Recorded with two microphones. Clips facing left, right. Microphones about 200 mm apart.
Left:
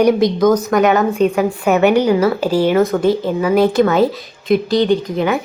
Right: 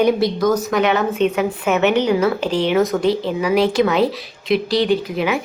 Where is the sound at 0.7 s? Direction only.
45° left (ahead or behind).